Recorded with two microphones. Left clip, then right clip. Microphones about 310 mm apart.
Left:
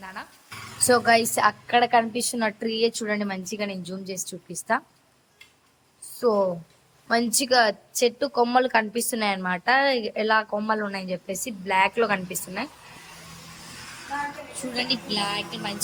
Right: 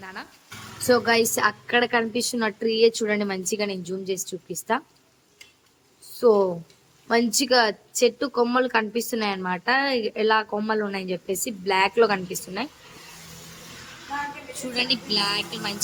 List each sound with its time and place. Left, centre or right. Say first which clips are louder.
0.0 s a woman's voice: even; centre
6.1 s a woman's voice: right 3 dB; centre
14.7 s a woman's voice: right 3 dB; centre